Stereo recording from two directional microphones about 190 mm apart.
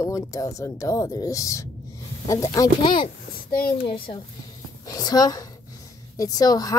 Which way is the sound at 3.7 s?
25° left (ahead or behind).